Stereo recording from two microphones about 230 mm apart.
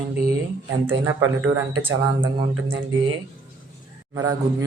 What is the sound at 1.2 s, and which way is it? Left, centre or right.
Speech, right.